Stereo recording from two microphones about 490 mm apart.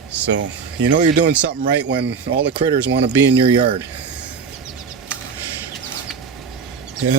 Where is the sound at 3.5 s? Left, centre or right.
Centre.